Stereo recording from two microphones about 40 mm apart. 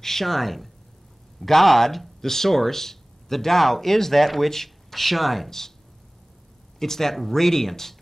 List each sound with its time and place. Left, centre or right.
0.0 s speech: centre
6.8 s speech: centre